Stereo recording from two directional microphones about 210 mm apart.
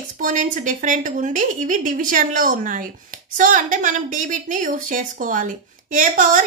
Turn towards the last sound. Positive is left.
turn(degrees=-40)  # may be behind; listen again after turning